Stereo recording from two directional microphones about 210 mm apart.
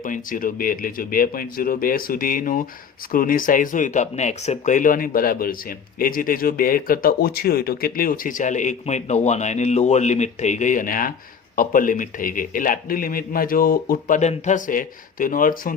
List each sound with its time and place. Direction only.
0.0 s speech: 40° left (ahead or behind)